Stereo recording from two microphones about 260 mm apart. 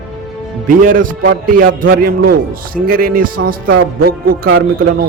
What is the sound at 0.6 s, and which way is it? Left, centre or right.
A man's voice, right.